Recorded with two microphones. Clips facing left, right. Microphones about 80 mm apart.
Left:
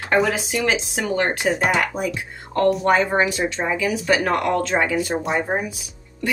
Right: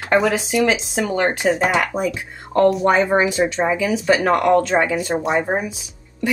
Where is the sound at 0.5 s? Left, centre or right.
Centre.